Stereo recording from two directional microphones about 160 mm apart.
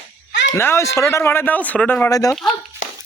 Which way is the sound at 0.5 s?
15° left (ahead or behind).